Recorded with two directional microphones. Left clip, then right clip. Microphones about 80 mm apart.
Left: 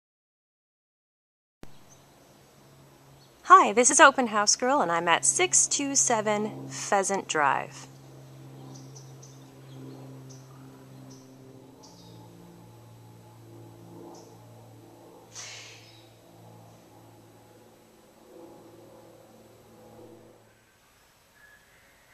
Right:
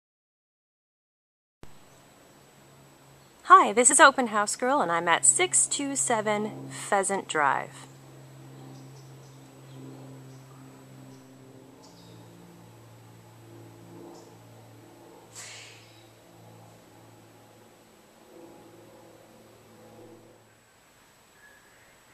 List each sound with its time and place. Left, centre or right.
3.4 s a woman's voice: left
6.7 s a woman's voice: left
7.2 s a woman's voice: centre